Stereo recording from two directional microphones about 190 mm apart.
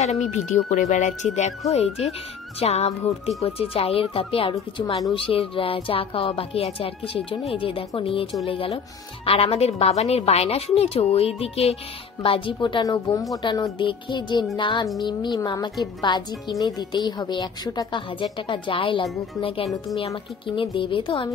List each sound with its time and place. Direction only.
0.0 s a woman's voice: 35° left (ahead or behind)